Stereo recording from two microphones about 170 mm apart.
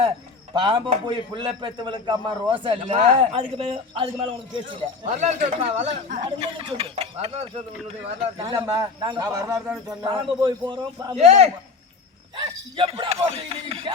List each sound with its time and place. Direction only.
0.5 s a man's voice: 30° right (ahead or behind)
5.0 s speech: 40° right (ahead or behind)
8.4 s a man's voice: 15° right (ahead or behind)
9.6 s a man's voice: 5° right (ahead or behind)
10.0 s a man's voice: 25° right (ahead or behind)
11.1 s speech: 40° right (ahead or behind)